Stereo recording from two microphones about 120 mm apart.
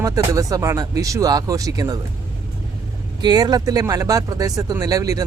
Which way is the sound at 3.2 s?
35° right (ahead or behind).